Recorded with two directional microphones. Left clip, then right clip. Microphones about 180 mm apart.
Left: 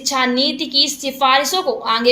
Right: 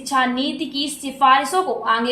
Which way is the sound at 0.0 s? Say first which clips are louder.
Left 3 dB; 30° left (ahead or behind).